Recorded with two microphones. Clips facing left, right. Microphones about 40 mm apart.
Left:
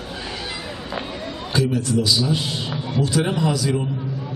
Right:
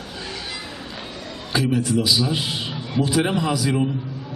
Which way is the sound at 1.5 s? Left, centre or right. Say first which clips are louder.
Even; centre.